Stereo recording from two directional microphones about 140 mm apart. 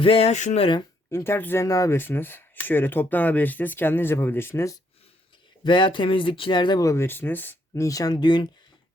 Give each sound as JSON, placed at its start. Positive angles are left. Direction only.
{"t": 0.0, "sound": "speech", "side_deg": 45}
{"t": 0.6, "sound": "speech", "side_deg": 35}
{"t": 1.1, "sound": "speech", "side_deg": 15}
{"t": 5.6, "sound": "speech", "side_deg": 35}